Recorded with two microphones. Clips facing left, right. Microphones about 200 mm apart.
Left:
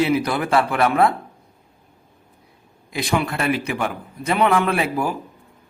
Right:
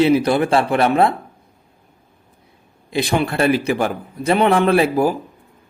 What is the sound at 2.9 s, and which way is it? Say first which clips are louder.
A man's voice: right 4 dB; 30° right (ahead or behind).